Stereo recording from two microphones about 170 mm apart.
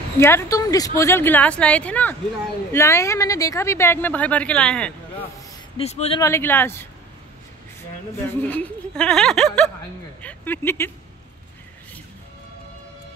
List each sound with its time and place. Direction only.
0.2 s speech: 15° left (ahead or behind)
5.8 s speech: 35° left (ahead or behind)
6.1 s speech: 15° left (ahead or behind)
8.2 s speech: 10° left (ahead or behind)